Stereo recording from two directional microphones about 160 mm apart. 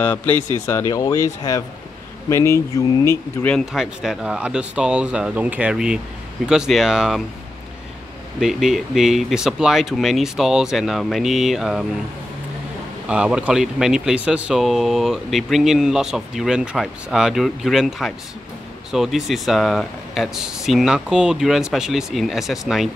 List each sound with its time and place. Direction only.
0.0 s speech: 10° left (ahead or behind)
3.4 s speech: centre (ahead or behind)
8.4 s speech: centre (ahead or behind)
13.1 s speech: 5° right (ahead or behind)